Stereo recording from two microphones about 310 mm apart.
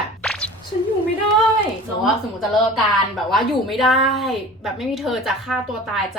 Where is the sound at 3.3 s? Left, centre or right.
Centre.